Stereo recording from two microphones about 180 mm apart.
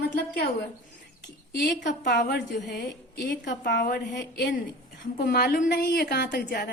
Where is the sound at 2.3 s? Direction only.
70° left (ahead or behind).